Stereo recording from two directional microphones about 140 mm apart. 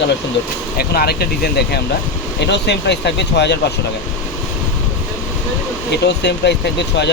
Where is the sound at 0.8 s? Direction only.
90° left.